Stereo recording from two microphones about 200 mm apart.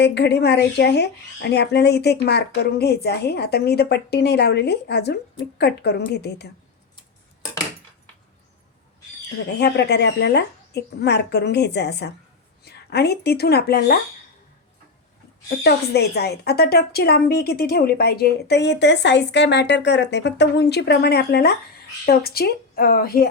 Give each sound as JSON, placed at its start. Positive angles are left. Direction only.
{"t": 0.0, "sound": "a woman's voice", "side_deg": 60}
{"t": 9.6, "sound": "a woman's voice", "side_deg": 55}
{"t": 15.4, "sound": "a woman's voice", "side_deg": 55}